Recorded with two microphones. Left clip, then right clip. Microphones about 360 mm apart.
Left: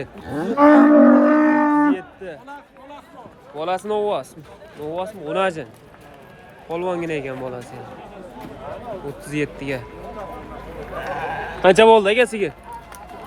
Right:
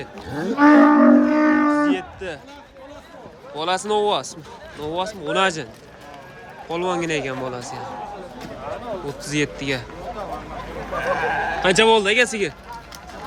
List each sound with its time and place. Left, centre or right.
0.5 s speech: centre
1.0 s music: centre
3.5 s speech: centre
6.7 s speech: centre
9.2 s speech: centre
10.9 s sheep: right
11.6 s speech: centre